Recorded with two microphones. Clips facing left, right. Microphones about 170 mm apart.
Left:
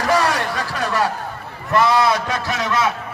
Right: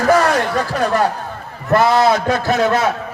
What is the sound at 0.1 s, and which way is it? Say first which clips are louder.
A man's voice: right 5 dB; 50° right (ahead or behind).